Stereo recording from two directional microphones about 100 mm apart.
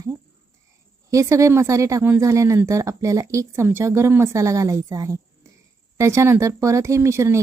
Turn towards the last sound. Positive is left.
turn(degrees=-30)  # may be behind; listen again after turning